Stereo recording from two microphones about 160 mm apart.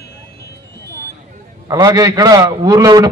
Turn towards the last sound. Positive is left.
turn(degrees=-25)  # may be behind; listen again after turning